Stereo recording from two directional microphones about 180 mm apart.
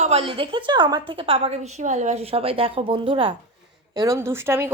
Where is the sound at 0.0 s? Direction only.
35° right (ahead or behind).